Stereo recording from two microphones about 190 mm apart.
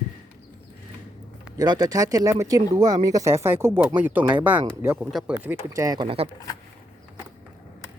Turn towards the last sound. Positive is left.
turn(degrees=-25)  # may be behind; listen again after turning